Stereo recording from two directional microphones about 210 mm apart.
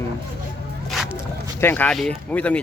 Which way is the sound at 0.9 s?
Centre (ahead or behind).